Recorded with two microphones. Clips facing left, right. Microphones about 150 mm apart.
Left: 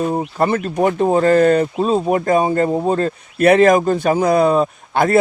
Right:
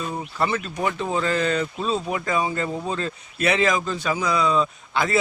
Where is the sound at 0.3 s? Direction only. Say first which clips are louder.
Left 6 dB; 50° left (ahead or behind).